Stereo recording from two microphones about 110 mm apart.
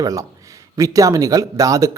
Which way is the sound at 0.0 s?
30° right (ahead or behind).